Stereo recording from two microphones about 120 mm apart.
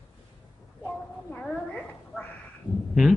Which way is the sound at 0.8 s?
15° left (ahead or behind).